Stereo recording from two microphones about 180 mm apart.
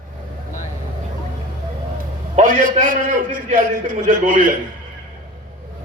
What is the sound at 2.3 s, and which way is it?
A man's voice, 45° right (ahead or behind).